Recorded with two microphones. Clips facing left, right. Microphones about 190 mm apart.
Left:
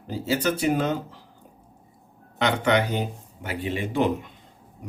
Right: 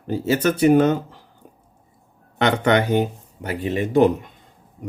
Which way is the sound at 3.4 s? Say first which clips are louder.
Right 5 dB; 40° right (ahead or behind).